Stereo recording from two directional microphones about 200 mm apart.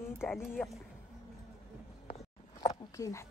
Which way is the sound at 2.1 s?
20° left (ahead or behind).